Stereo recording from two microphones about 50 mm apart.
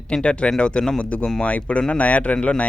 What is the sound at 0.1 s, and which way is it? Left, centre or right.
Speech, left.